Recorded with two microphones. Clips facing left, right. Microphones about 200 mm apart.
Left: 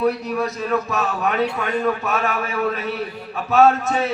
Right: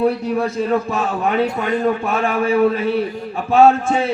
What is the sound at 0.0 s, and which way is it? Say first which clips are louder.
A man's voice: right 3 dB; 30° right (ahead or behind).